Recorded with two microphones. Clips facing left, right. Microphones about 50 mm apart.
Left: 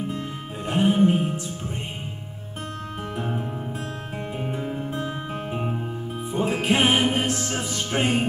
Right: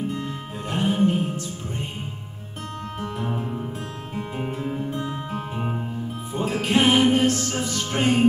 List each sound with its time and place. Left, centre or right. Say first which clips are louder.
0.1 s music: right 1 dB; centre
3.0 s music: right 1 dB; centre
4.9 s music: even; centre